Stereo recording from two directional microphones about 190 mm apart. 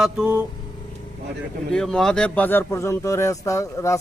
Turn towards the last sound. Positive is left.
turn(degrees=15)  # may be behind; listen again after turning